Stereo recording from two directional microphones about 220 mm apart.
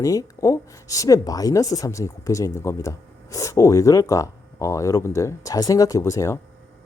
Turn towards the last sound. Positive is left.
turn(degrees=15)  # may be behind; listen again after turning